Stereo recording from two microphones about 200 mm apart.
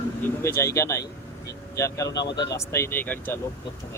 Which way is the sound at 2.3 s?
15° left (ahead or behind).